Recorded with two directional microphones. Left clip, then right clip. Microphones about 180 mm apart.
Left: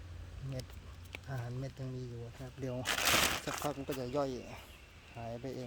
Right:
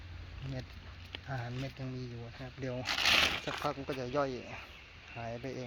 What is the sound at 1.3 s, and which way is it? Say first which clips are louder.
Speech: right 5 dB; centre (ahead or behind).